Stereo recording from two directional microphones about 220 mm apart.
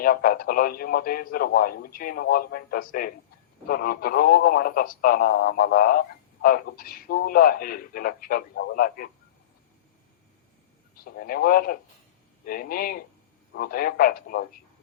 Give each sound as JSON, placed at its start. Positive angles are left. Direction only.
{"t": 0.0, "sound": "speech", "side_deg": 40}
{"t": 11.0, "sound": "speech", "side_deg": 40}